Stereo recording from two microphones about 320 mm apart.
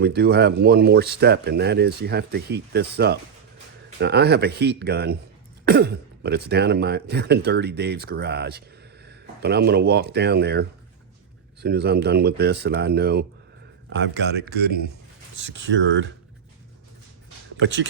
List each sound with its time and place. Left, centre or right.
0.0 s speech: right
17.6 s speech: right